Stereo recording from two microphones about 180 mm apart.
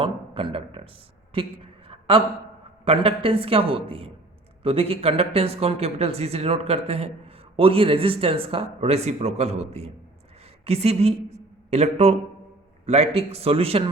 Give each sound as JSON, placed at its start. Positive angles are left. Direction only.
{"t": 0.0, "sound": "speech", "side_deg": -30}
{"t": 1.3, "sound": "a sound", "side_deg": -30}
{"t": 2.8, "sound": "a woman's voice", "side_deg": -30}